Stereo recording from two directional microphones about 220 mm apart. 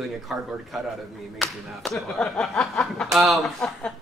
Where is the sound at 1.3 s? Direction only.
Centre (ahead or behind).